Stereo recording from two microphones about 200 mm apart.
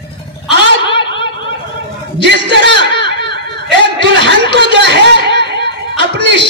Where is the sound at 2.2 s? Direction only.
60° right (ahead or behind).